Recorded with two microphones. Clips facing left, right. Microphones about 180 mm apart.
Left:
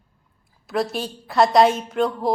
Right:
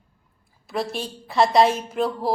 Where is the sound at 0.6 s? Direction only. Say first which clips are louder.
Left 3 dB; centre (ahead or behind).